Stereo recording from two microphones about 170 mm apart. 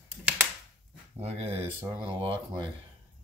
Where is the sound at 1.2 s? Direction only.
40° right (ahead or behind).